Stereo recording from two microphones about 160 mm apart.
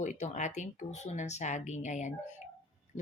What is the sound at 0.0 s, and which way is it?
Speech, 50° left (ahead or behind).